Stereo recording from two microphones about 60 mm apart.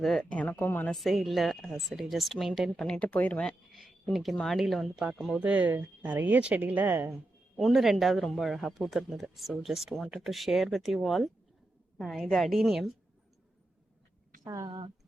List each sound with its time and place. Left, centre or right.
0.0 s speech: centre
0.3 s speech: left
0.6 s a woman's voice: left
0.9 s speech: centre
2.8 s speech: centre
3.1 s speech: left
3.7 s a sound: centre
4.1 s speech: centre
5.4 s speech: right
7.5 s speech: centre
14.4 s a woman's voice: right